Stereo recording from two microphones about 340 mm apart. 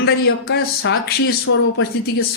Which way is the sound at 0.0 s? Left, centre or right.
Left.